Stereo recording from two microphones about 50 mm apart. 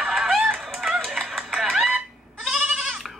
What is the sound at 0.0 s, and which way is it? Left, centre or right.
Fowl, centre.